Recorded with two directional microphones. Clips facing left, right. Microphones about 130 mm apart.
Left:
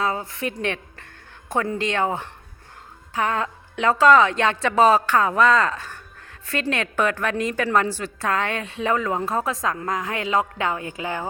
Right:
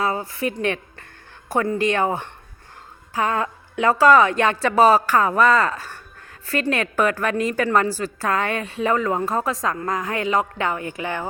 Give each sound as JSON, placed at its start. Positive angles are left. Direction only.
{"t": 0.0, "sound": "a woman's voice", "side_deg": -5}
{"t": 10.8, "sound": "speech", "side_deg": 20}